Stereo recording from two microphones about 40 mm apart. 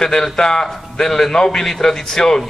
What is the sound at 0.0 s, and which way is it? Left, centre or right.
A man's voice, centre.